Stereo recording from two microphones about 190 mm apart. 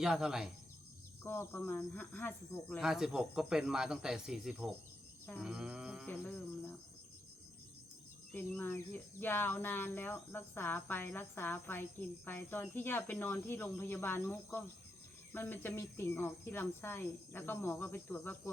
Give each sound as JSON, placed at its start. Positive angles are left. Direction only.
{"t": 0.0, "sound": "speech", "side_deg": -5}
{"t": 1.2, "sound": "speech", "side_deg": 10}
{"t": 2.8, "sound": "speech", "side_deg": -5}
{"t": 8.3, "sound": "speech", "side_deg": 10}